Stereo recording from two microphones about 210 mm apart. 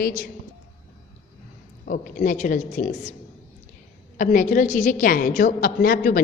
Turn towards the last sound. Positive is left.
turn(degrees=45)  # may be behind; listen again after turning